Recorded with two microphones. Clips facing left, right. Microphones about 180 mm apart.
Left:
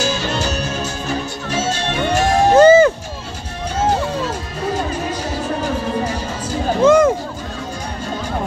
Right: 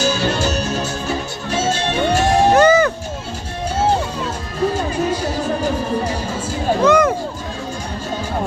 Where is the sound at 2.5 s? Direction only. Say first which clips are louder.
Left 6 dB; 25° left (ahead or behind).